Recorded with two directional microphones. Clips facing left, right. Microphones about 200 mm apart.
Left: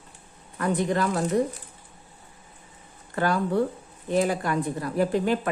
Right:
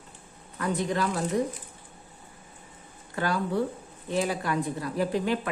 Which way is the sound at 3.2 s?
50° left (ahead or behind).